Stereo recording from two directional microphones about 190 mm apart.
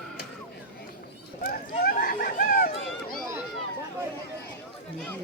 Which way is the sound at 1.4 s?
50° left (ahead or behind).